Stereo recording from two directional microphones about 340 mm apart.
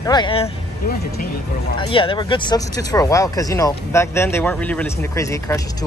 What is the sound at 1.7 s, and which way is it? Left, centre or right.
Speech, centre.